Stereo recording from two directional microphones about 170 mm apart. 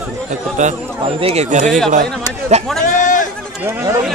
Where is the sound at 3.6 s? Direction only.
15° right (ahead or behind).